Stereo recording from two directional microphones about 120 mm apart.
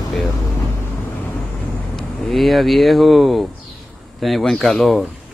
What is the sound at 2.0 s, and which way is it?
Speech, 5° left (ahead or behind).